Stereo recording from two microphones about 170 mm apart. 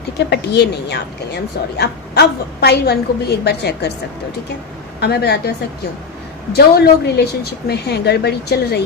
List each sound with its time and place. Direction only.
0.3 s speech: 75° left (ahead or behind)
4.9 s speech: 70° left (ahead or behind)